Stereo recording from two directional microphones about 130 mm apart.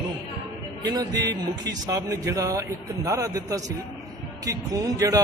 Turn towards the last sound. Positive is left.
turn(degrees=-25)  # may be behind; listen again after turning